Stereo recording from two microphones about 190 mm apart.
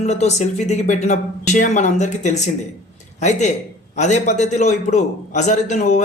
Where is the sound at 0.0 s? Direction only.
35° left (ahead or behind).